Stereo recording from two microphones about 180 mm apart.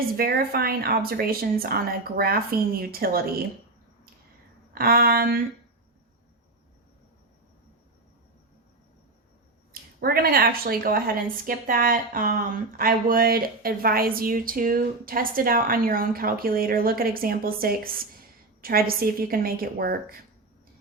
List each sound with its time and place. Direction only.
0.2 s speech: 60° right (ahead or behind)
4.7 s speech: 55° right (ahead or behind)
10.0 s a woman's voice: 60° right (ahead or behind)